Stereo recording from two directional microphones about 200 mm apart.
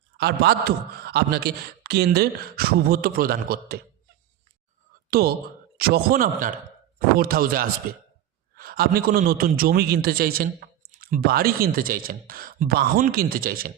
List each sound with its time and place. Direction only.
0.2 s speech: 55° right (ahead or behind)
5.1 s speech: 50° right (ahead or behind)